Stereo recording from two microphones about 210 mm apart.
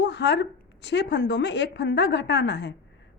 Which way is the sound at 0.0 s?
55° left (ahead or behind).